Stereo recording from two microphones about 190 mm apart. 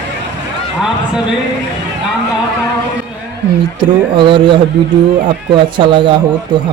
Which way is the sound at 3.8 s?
25° right (ahead or behind).